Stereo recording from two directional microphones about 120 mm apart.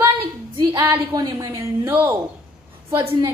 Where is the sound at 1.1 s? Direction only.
40° right (ahead or behind).